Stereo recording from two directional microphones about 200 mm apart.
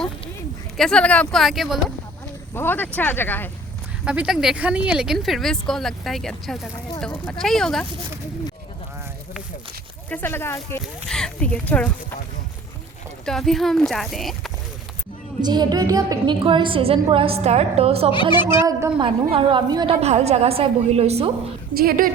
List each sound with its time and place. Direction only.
0.8 s speech: 5° left (ahead or behind)
2.6 s speech: 10° left (ahead or behind)
4.0 s speech: 5° right (ahead or behind)
10.1 s speech: 10° left (ahead or behind)
13.2 s speech: centre (ahead or behind)
15.4 s a woman's voice: 20° right (ahead or behind)
18.1 s speech: 25° left (ahead or behind)
18.4 s a woman's voice: 15° right (ahead or behind); by 21.3 s 30° right (ahead or behind)
21.8 s a woman's voice: 45° right (ahead or behind)